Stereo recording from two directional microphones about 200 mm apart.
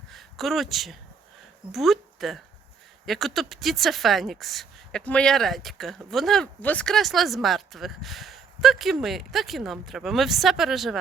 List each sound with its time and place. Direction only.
0.1 s speech: centre (ahead or behind)